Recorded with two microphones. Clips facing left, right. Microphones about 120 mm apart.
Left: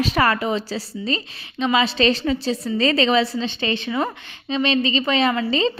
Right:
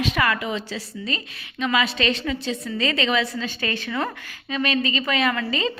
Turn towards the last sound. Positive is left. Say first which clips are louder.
# left 4 dB
turn(degrees=30)  # may be behind; listen again after turning